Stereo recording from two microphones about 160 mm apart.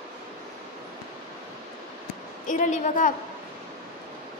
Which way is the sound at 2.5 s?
50° left (ahead or behind).